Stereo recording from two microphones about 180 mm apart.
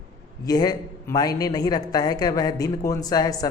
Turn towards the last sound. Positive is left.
turn(degrees=20)  # may be behind; listen again after turning